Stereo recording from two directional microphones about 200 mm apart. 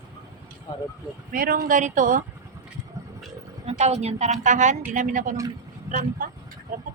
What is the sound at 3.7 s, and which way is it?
Speech, 35° right (ahead or behind).